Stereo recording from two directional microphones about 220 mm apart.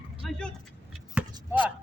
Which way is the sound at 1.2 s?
5° right (ahead or behind).